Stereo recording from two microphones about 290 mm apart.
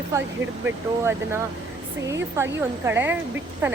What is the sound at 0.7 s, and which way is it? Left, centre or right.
A woman's voice, centre.